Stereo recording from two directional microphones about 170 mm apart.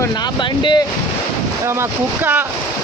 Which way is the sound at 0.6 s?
25° left (ahead or behind).